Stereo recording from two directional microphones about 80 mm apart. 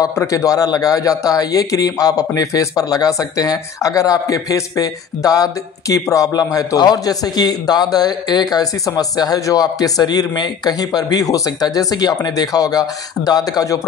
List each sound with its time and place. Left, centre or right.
0.1 s a man's voice: left